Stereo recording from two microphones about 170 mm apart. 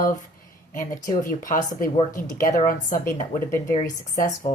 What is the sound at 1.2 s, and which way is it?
Speech, 50° left (ahead or behind).